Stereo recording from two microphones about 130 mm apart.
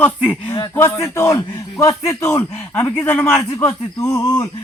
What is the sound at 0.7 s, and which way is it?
A man's voice, 20° left (ahead or behind).